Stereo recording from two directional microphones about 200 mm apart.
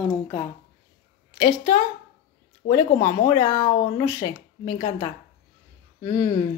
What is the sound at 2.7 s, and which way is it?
Speech, 20° left (ahead or behind).